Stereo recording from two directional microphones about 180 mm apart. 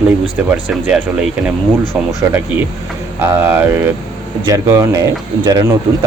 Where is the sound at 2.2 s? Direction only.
15° right (ahead or behind).